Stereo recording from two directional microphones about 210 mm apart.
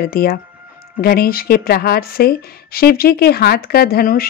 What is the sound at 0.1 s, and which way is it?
Speech, 45° left (ahead or behind).